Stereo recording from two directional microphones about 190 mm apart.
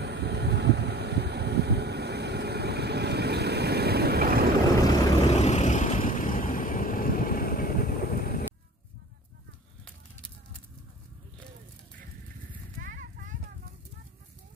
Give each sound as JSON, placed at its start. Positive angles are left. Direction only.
{"t": 0.0, "sound": "vehicle", "side_deg": -60}
{"t": 5.3, "sound": "vehicle", "side_deg": 35}
{"t": 12.8, "sound": "a sound", "side_deg": -45}